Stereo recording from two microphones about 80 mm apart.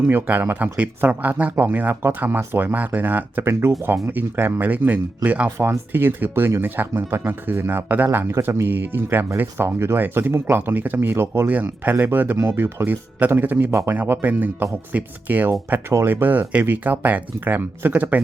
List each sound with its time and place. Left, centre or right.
0.0 s speech: right
3.5 s speech: right
4.1 s speech: right
13.7 s speech: right
13.9 s speech: right